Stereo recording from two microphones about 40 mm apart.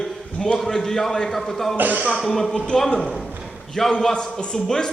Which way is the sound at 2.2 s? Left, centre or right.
Centre.